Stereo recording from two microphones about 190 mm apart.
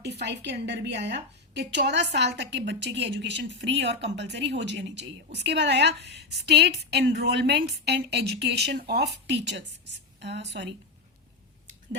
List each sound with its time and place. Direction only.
0.0 s a woman's voice: 65° right (ahead or behind)